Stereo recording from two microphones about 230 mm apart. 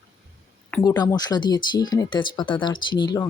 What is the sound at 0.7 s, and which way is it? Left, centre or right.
Speech, centre.